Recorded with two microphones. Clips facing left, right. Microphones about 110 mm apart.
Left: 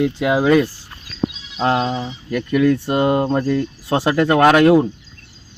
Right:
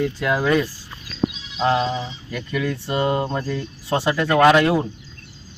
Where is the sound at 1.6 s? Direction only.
50° left (ahead or behind).